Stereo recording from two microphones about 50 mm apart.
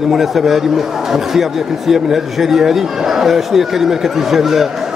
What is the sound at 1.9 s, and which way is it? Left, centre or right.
A man's voice, centre.